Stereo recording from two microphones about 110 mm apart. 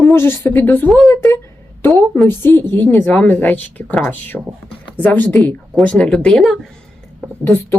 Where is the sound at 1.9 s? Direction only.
25° left (ahead or behind); by 6.5 s 5° left (ahead or behind).